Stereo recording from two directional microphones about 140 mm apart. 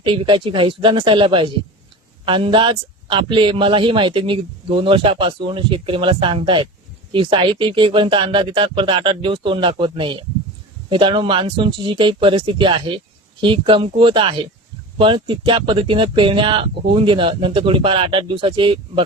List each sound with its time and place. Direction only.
0.0 s a man's voice: 35° right (ahead or behind)